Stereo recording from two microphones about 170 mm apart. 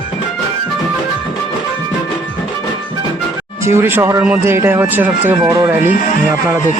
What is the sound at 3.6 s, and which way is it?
Speech, 15° right (ahead or behind).